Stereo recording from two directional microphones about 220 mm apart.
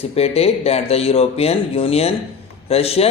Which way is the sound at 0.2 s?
25° left (ahead or behind).